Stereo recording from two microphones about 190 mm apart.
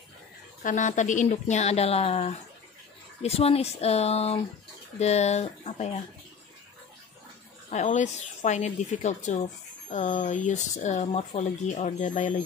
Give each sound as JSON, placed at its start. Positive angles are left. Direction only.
{"t": 0.6, "sound": "speech", "side_deg": 40}
{"t": 7.7, "sound": "speech", "side_deg": 40}